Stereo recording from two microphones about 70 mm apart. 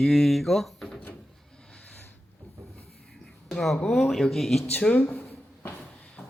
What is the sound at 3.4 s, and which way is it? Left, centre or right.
Speech, centre.